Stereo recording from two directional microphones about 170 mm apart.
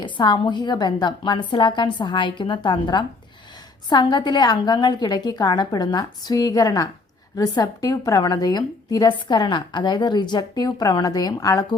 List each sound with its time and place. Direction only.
0.0 s a woman's voice: 25° left (ahead or behind)